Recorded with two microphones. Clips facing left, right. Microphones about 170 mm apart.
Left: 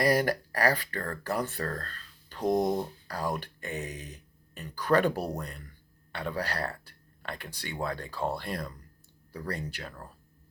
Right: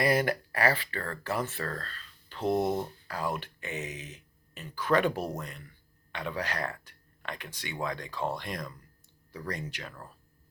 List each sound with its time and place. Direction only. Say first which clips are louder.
0.0 s speech: left 1 dB; 40° left (ahead or behind)
2.4 s speech: left 1 dB; 15° left (ahead or behind)
3.1 s speech: left 1 dB; 40° left (ahead or behind)